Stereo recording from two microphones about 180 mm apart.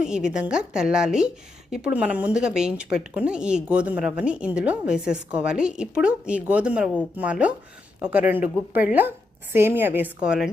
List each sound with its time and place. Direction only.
0.0 s a woman's voice: 5° right (ahead or behind)